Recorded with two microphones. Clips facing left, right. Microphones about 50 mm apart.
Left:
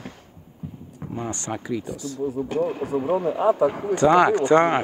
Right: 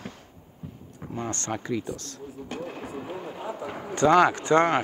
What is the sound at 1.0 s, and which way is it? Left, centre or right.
Speech, centre.